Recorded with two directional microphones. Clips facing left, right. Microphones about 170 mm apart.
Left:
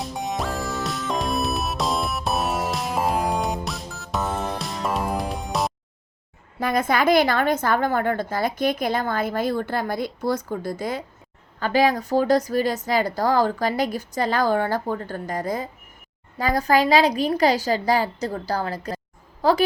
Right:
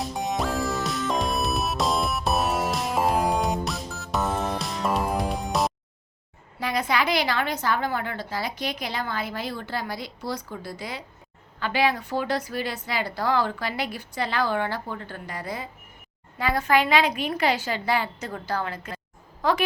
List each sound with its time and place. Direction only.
0.0 s music: centre (ahead or behind)
6.6 s a woman's voice: 50° left (ahead or behind); by 19.6 s 35° left (ahead or behind)